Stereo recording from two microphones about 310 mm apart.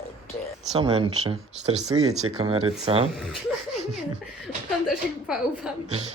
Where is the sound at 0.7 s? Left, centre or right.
Centre.